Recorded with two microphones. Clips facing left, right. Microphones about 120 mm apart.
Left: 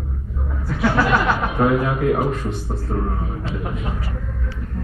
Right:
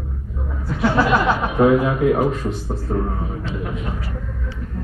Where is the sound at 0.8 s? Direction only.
20° right (ahead or behind).